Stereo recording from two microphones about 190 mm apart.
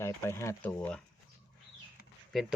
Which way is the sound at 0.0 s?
15° left (ahead or behind).